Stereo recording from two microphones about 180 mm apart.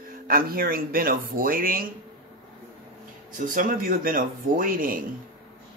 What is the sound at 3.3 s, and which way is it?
Speech, 50° right (ahead or behind).